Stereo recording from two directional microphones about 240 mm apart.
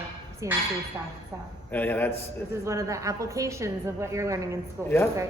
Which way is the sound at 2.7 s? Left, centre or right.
Centre.